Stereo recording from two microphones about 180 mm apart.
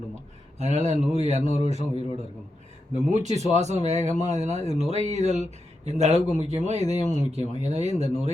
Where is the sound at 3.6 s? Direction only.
40° right (ahead or behind).